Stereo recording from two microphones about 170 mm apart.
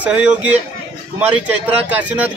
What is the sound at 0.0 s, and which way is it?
Speech, 5° right (ahead or behind).